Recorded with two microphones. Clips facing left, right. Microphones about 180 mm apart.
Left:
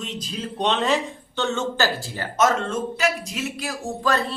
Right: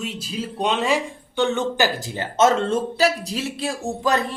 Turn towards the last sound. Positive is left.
turn(degrees=-20)  # may be behind; listen again after turning